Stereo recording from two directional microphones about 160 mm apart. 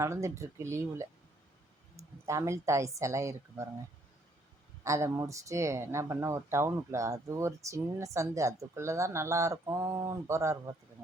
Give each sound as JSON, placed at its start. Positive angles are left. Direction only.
{"t": 0.0, "sound": "speech", "side_deg": -20}
{"t": 4.8, "sound": "speech", "side_deg": -20}